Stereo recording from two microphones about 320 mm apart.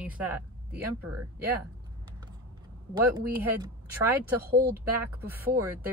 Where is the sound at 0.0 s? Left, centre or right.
Centre.